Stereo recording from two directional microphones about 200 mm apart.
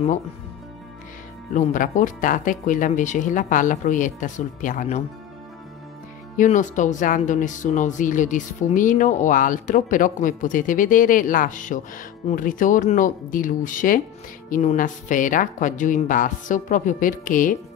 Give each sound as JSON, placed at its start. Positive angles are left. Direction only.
{"t": 1.5, "sound": "speech", "side_deg": 40}
{"t": 6.3, "sound": "speech", "side_deg": 40}